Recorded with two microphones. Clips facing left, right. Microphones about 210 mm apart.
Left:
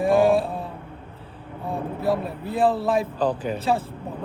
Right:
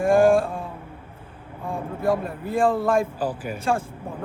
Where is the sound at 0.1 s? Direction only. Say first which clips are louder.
Right 2 dB; 50° right (ahead or behind).